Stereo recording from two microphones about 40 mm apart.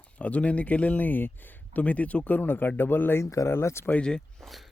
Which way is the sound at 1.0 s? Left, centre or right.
Left.